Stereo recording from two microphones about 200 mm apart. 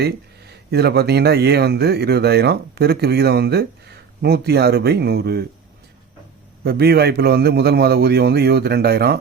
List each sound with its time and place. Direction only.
0.7 s speech: 55° right (ahead or behind)
6.6 s speech: 55° right (ahead or behind)